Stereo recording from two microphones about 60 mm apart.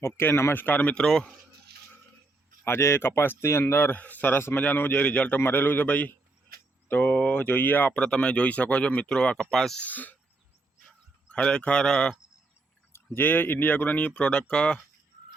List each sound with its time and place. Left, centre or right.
0.0 s speech: left
0.9 s speech: centre
2.6 s speech: left
5.4 s speech: left
7.9 s speech: centre
9.5 s speech: centre
9.8 s speech: left
11.3 s speech: centre
13.1 s speech: left